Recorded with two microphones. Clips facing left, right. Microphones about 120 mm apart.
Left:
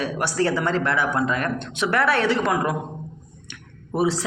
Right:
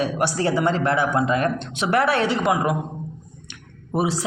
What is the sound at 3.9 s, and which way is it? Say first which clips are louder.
Speech: left 1 dB; 15° right (ahead or behind).